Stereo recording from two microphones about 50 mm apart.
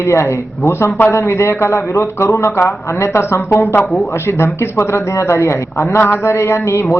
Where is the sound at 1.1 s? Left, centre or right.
Left.